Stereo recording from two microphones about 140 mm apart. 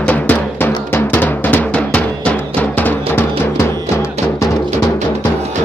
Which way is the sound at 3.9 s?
20° left (ahead or behind).